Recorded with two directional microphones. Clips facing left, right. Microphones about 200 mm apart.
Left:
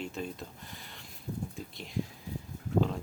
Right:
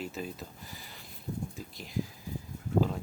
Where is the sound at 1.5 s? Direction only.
Centre (ahead or behind).